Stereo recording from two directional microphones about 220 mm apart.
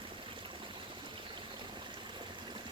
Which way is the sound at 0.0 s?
20° right (ahead or behind).